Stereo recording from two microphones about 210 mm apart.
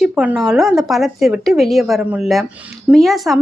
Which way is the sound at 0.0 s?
5° right (ahead or behind).